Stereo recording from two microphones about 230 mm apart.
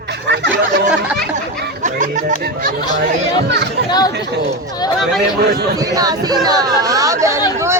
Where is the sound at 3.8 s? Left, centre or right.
Centre.